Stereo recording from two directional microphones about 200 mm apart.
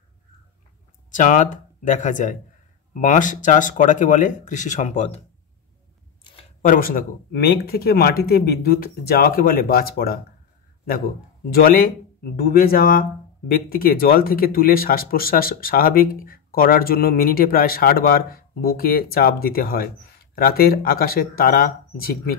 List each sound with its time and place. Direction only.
1.1 s speech: 40° left (ahead or behind)
6.6 s speech: 45° left (ahead or behind)
11.5 s speech: 50° left (ahead or behind)